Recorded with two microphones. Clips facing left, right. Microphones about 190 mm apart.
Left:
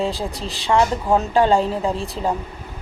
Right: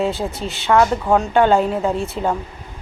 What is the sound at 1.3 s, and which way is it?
Speech, 30° left (ahead or behind).